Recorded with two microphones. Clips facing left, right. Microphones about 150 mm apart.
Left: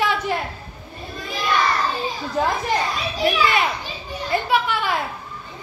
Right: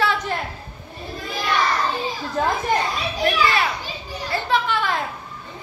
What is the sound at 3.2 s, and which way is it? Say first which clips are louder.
Speech: left 1 dB; 15° left (ahead or behind).